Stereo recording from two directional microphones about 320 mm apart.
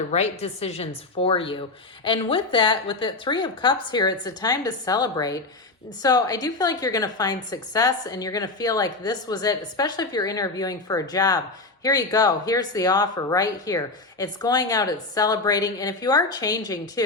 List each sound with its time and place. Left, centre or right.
0.1 s a woman's voice: centre